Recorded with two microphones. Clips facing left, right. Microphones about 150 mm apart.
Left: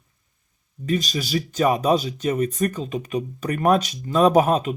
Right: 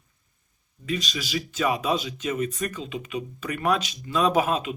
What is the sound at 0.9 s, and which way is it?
Speech, 40° left (ahead or behind).